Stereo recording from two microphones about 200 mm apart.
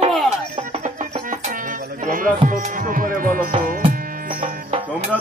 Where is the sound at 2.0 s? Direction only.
45° right (ahead or behind).